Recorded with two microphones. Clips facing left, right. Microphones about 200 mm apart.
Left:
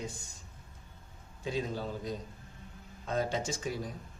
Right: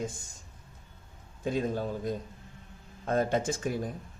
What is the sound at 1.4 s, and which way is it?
Speech, 50° right (ahead or behind).